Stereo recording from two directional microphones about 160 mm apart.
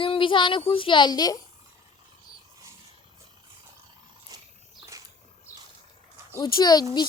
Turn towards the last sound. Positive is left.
turn(degrees=25)  # may be behind; listen again after turning